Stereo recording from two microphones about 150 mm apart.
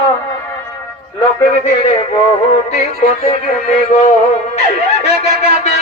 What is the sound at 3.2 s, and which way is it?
Speech, 45° left (ahead or behind).